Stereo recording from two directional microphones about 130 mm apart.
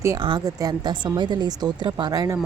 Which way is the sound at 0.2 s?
40° right (ahead or behind).